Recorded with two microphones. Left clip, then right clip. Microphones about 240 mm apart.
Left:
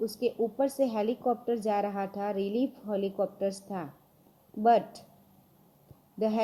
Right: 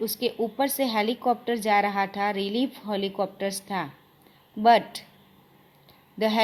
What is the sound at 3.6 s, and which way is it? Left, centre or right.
Speech, right.